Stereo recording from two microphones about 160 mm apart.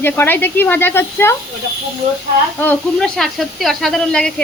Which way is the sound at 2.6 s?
10° left (ahead or behind).